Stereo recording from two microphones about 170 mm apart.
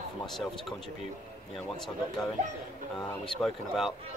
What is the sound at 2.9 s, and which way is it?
A man's voice, 5° left (ahead or behind).